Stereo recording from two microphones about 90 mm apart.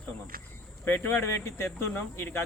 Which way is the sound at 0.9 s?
25° left (ahead or behind).